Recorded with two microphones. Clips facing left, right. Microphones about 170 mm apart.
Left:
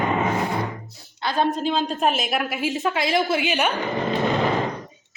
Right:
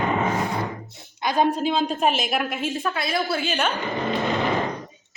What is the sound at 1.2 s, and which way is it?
Speech, 15° right (ahead or behind).